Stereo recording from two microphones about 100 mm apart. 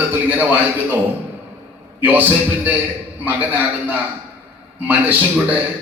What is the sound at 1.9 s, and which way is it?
Speech, 20° right (ahead or behind).